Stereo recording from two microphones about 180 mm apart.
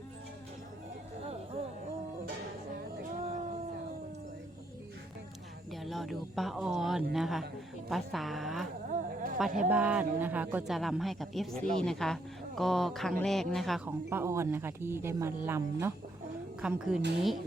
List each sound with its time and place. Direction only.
5.7 s speech: centre (ahead or behind)
8.9 s a sound: 50° right (ahead or behind)
9.6 s speech: 5° right (ahead or behind)
14.1 s speech: 15° right (ahead or behind)